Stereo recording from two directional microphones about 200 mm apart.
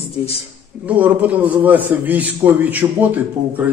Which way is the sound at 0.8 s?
10° right (ahead or behind).